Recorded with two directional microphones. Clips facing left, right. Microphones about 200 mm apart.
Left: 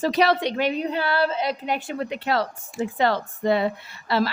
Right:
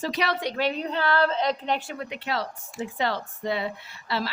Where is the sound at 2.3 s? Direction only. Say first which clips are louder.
Left 5 dB; 50° left (ahead or behind).